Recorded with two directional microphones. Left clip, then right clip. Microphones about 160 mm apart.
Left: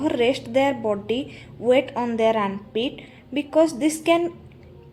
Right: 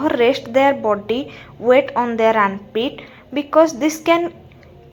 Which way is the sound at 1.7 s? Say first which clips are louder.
Right 6 dB; 20° left (ahead or behind).